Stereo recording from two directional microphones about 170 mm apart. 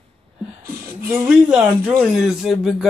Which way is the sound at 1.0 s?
10° right (ahead or behind).